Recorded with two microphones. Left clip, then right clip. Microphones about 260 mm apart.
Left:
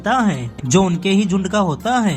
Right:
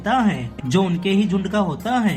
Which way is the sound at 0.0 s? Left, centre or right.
Left.